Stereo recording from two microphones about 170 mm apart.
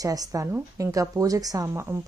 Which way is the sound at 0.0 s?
20° right (ahead or behind).